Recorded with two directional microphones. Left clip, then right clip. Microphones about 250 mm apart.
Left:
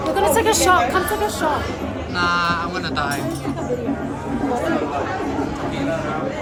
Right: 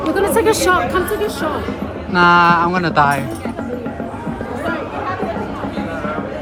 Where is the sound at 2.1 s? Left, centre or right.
Right.